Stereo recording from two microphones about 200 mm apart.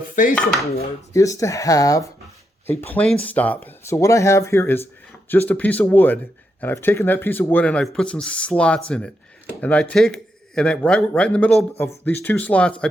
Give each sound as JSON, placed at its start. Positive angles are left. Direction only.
{"t": 0.2, "sound": "dishes", "side_deg": 40}
{"t": 1.1, "sound": "speech", "side_deg": 15}